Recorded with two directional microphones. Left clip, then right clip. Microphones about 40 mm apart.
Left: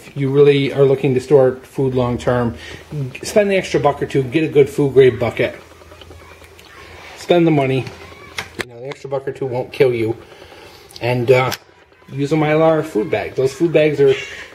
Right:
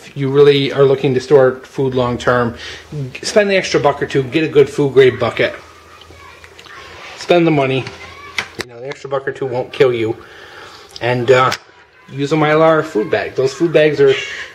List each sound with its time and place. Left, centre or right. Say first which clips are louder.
0.3 s speech: right 2 dB; right
4.6 s a man's voice: right 1 dB; right
7.0 s a sound: right 4 dB; right
7.2 s a sound: right 2 dB; right
8.8 s speech: right 4 dB; right
12.4 s speech: right 3 dB; right